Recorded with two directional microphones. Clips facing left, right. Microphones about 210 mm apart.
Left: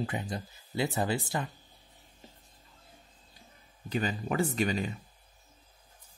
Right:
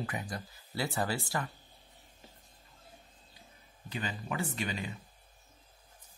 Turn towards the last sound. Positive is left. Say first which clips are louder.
# left 7 dB
turn(degrees=40)  # may be behind; listen again after turning